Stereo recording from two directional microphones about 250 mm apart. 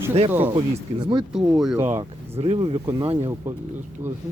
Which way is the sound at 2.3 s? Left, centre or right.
Right.